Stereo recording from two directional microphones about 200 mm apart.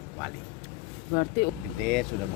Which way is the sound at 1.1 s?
55° left (ahead or behind).